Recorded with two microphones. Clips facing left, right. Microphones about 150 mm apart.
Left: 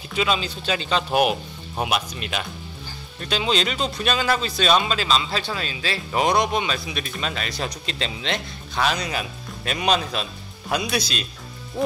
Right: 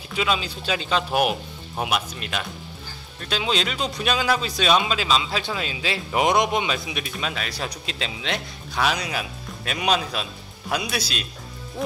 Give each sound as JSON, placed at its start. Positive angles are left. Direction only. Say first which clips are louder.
{"t": 0.1, "sound": "speech", "louder": "left 1 dB", "side_deg": -5}